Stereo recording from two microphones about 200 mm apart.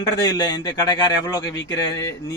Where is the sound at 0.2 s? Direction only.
20° left (ahead or behind).